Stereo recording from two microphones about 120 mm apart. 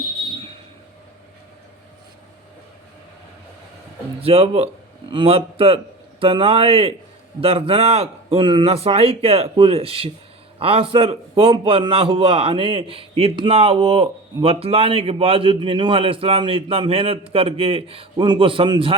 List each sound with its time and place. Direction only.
4.2 s a man's voice: 55° right (ahead or behind)